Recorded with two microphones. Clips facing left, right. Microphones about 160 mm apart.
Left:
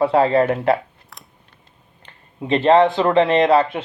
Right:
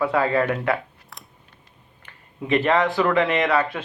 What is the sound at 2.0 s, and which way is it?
Speech, 30° left (ahead or behind).